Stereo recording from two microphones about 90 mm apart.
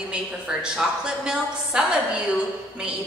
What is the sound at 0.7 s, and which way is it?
A woman's voice, 5° right (ahead or behind).